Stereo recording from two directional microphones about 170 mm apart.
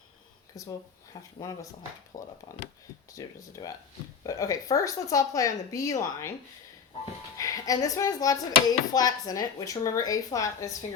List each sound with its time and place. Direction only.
0.5 s speech: 20° left (ahead or behind)
7.3 s a woman's voice: 20° left (ahead or behind)